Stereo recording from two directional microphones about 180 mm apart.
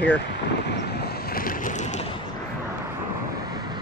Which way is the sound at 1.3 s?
50° left (ahead or behind).